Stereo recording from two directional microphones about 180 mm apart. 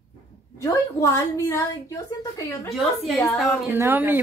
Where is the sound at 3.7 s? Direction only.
10° right (ahead or behind).